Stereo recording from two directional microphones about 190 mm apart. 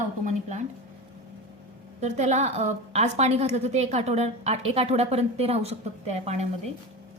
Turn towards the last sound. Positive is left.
turn(degrees=-35)  # may be behind; listen again after turning